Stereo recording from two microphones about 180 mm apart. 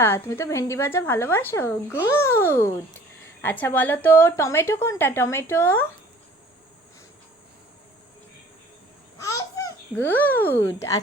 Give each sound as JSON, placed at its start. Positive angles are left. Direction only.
{"t": 0.0, "sound": "a woman's voice", "side_deg": 15}
{"t": 9.2, "sound": "a child's voice", "side_deg": 20}